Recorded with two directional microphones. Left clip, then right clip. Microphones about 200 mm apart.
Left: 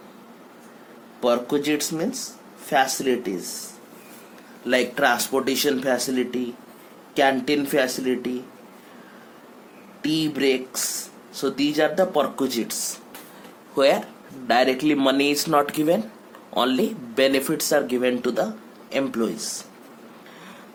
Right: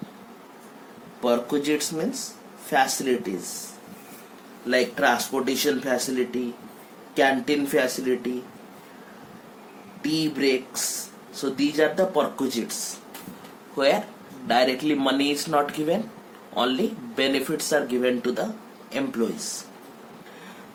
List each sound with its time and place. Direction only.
1.2 s speech: 40° left (ahead or behind)
4.6 s speech: 50° left (ahead or behind)
10.0 s speech: 45° left (ahead or behind)